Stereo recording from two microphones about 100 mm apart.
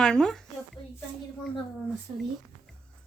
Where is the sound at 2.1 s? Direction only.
55° right (ahead or behind).